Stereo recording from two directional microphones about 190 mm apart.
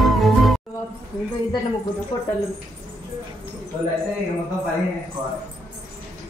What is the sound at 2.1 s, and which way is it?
Speech, 25° left (ahead or behind).